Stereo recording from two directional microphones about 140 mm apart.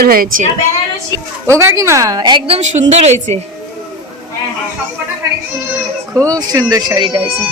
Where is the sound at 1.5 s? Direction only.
20° right (ahead or behind).